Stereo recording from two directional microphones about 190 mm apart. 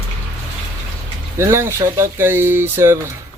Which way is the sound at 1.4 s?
15° right (ahead or behind).